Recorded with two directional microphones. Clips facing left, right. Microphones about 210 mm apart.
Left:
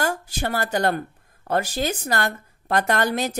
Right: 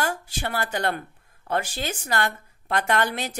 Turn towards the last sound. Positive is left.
turn(degrees=40)  # may be behind; listen again after turning